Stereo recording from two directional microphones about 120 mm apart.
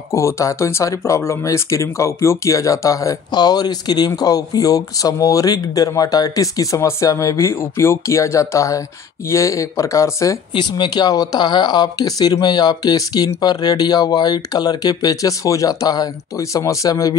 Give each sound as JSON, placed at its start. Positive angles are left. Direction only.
{"t": 0.1, "sound": "speech", "side_deg": 25}
{"t": 10.5, "sound": "speech", "side_deg": 40}